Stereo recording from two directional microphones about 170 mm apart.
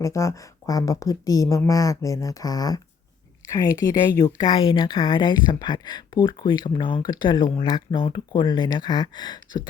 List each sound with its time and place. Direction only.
0.0 s speech: 20° left (ahead or behind)